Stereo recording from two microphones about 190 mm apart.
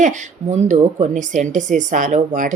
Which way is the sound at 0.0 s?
40° right (ahead or behind).